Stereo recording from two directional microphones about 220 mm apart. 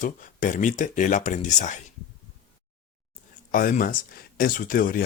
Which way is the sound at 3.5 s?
40° left (ahead or behind).